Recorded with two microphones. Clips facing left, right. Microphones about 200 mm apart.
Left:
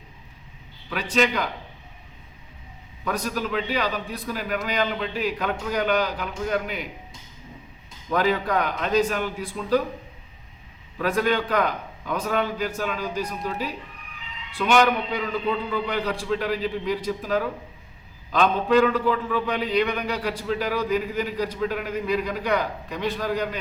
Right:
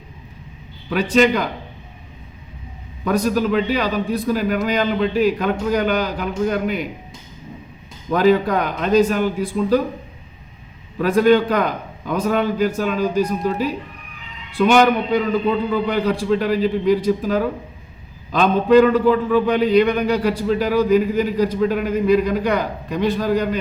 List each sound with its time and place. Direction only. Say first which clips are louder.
0.9 s a man's voice: right 8 dB; 40° right (ahead or behind)
3.0 s a man's voice: right 9 dB; 40° right (ahead or behind)
8.1 s a man's voice: right 7 dB; 35° right (ahead or behind)
10.9 s a man's voice: right 9 dB; 35° right (ahead or behind)